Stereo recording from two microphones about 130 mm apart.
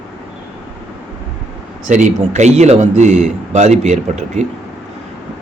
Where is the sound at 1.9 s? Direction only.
65° right (ahead or behind).